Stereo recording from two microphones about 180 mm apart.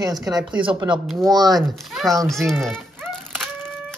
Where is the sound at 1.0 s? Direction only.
Centre (ahead or behind).